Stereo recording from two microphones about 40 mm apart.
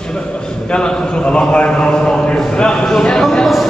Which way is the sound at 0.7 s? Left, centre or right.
Left.